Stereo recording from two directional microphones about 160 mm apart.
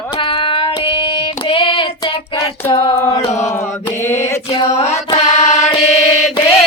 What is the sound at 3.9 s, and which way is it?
Mantra, 15° left (ahead or behind).